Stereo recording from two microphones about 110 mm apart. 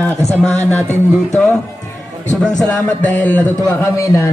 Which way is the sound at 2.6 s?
15° left (ahead or behind).